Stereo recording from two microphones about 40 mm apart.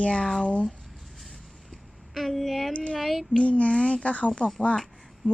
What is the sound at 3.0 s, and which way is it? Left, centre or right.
Speech, centre.